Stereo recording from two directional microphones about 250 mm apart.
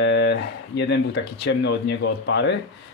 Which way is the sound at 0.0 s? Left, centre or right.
Left.